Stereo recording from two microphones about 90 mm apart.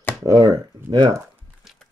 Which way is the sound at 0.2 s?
45° right (ahead or behind).